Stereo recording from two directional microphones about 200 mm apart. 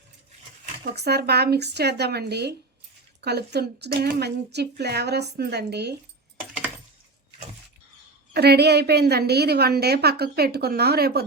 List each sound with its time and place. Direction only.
0.9 s speech: 55° right (ahead or behind)
8.3 s a woman's voice: 55° right (ahead or behind)